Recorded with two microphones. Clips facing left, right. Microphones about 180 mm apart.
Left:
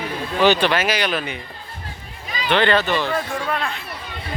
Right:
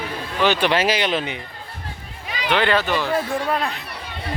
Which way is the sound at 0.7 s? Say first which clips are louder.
Right 1 dB; 30° right (ahead or behind).